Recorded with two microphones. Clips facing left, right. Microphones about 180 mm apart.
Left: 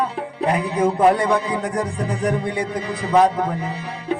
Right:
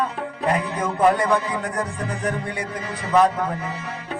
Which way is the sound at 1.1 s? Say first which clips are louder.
Left 2 dB; 35° left (ahead or behind).